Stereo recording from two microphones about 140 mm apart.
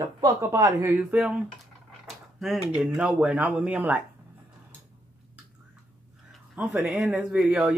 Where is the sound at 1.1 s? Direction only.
5° right (ahead or behind).